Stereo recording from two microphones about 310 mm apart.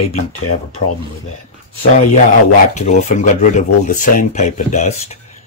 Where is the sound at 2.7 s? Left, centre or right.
Left.